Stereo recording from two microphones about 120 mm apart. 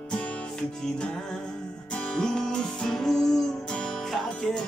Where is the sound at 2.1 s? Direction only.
5° left (ahead or behind).